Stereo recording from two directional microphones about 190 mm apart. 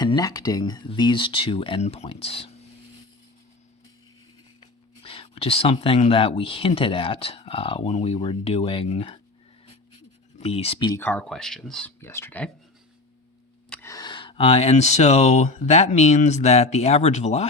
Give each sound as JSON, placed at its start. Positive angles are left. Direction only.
{"t": 0.0, "sound": "speech", "side_deg": 20}
{"t": 5.0, "sound": "speech", "side_deg": 30}
{"t": 10.3, "sound": "speech", "side_deg": 30}
{"t": 10.8, "sound": "speech", "side_deg": 15}
{"t": 13.7, "sound": "speech", "side_deg": 15}